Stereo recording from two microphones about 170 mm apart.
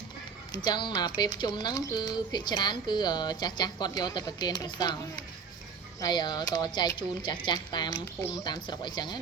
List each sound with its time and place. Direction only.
0.5 s speech: 25° left (ahead or behind)